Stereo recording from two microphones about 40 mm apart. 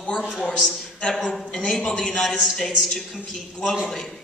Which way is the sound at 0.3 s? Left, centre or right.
Centre.